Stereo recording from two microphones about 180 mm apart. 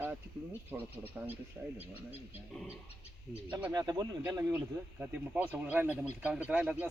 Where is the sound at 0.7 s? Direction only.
5° right (ahead or behind).